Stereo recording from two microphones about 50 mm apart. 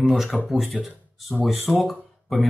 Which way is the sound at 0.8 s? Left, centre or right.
Centre.